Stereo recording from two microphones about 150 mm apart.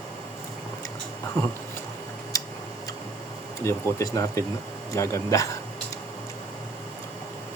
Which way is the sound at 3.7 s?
20° left (ahead or behind).